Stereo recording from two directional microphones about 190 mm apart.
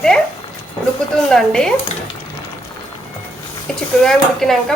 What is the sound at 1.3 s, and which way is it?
Speech, 5° left (ahead or behind).